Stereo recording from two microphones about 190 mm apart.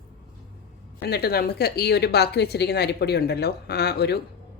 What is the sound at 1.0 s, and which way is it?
A woman's voice, 55° left (ahead or behind).